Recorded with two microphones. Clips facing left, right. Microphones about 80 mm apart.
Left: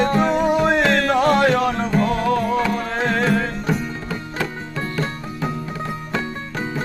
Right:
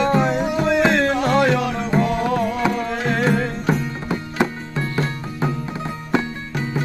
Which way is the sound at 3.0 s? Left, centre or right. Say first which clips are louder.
Left 4 dB; left.